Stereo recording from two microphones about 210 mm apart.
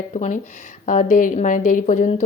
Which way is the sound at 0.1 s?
35° left (ahead or behind).